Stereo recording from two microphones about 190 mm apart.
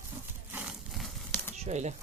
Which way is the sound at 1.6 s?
35° right (ahead or behind).